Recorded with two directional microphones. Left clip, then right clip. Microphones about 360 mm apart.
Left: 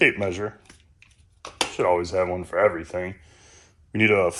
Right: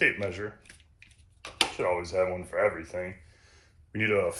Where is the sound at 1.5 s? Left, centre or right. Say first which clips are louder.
Left 6 dB; left.